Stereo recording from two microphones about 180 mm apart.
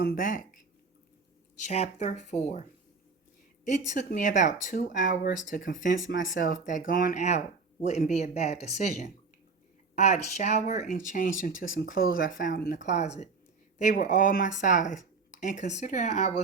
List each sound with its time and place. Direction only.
0.0 s speech: 55° left (ahead or behind)
1.5 s speech: 40° left (ahead or behind)
3.7 s speech: 45° left (ahead or behind)
6.4 s speech: 45° left (ahead or behind)